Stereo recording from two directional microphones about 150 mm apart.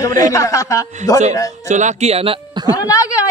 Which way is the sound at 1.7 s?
50° right (ahead or behind).